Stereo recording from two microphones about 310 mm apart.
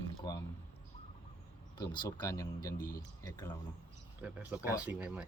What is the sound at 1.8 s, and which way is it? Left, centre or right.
Speech, centre.